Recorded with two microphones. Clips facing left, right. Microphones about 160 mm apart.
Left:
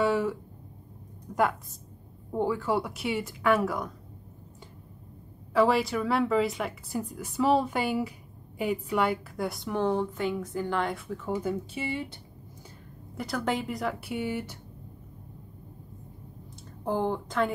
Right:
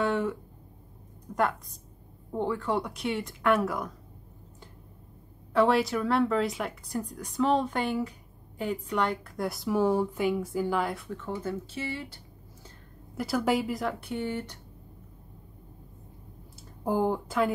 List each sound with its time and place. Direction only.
0.0 s a sound: 5° left (ahead or behind)
2.3 s a woman's voice: 5° left (ahead or behind)
5.5 s a woman's voice: centre (ahead or behind)
11.3 s speech: 15° left (ahead or behind)
13.1 s a woman's voice: 5° right (ahead or behind)
16.8 s speech: 10° right (ahead or behind)